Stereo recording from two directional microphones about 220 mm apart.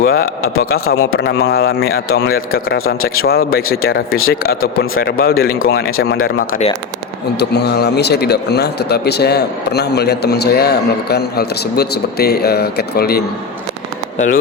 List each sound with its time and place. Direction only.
0.0 s speech: 45° left (ahead or behind)
7.3 s speech: 50° left (ahead or behind)